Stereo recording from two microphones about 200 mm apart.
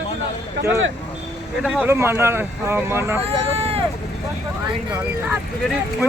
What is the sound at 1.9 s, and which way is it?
Speech, 10° right (ahead or behind).